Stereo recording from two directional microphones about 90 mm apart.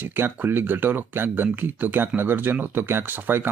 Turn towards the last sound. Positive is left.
turn(degrees=-20)  # may be behind; listen again after turning